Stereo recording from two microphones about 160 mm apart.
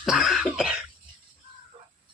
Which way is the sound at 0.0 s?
Centre (ahead or behind).